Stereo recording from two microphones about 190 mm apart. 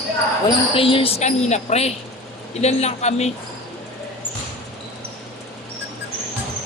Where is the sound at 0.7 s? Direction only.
30° left (ahead or behind).